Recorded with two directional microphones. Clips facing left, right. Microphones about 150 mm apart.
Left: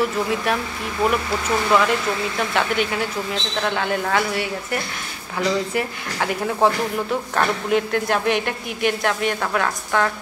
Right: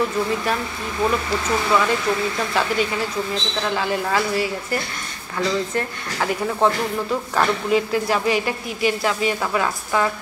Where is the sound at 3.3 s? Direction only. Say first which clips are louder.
Even; centre (ahead or behind).